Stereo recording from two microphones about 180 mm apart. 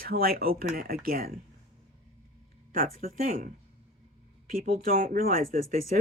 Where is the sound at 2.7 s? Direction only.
50° right (ahead or behind).